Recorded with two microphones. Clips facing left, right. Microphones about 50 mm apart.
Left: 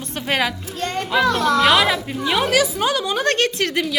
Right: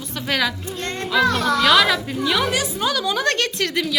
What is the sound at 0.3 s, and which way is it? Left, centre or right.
Speech, left.